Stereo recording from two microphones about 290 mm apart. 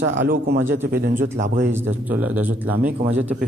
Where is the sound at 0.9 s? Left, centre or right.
Right.